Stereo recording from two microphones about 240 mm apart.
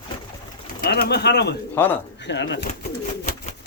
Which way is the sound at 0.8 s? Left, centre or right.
Left.